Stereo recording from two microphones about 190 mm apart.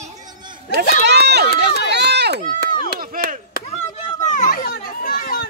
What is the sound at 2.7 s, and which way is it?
Chop, 50° right (ahead or behind).